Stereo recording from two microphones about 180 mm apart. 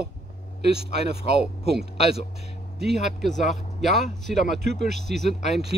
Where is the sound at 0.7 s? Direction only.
35° left (ahead or behind).